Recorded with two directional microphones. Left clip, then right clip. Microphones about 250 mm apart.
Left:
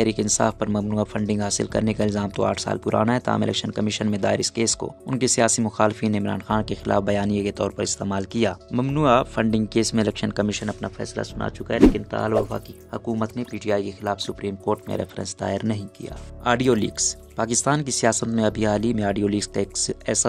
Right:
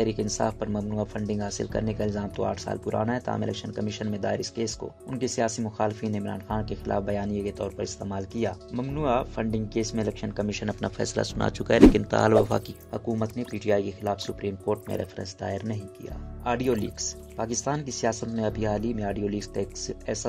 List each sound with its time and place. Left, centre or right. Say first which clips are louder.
0.0 s speech: left 5 dB; centre
10.6 s speech: left 1 dB; centre
11.0 s speech: right 1 dB; centre
12.9 s speech: left 3 dB; centre